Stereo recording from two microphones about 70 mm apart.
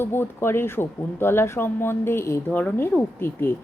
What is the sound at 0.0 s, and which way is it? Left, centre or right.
Speech, left.